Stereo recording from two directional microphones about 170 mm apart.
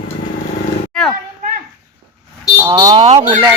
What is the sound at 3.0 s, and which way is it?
Speech, 40° right (ahead or behind).